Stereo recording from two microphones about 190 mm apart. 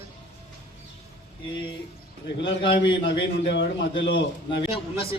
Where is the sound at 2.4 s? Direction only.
70° left (ahead or behind).